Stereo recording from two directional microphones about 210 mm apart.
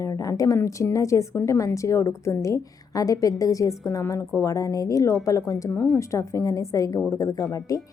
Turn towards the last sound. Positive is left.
turn(degrees=15)  # may be behind; listen again after turning